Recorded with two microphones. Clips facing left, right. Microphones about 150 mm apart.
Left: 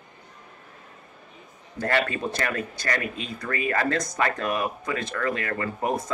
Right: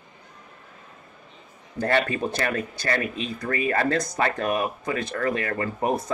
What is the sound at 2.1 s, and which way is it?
Speech, 30° right (ahead or behind).